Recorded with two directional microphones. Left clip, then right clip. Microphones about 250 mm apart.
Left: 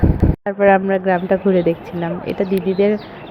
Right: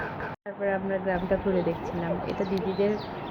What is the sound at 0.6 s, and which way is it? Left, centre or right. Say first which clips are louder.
A woman's voice: left 15 dB; left.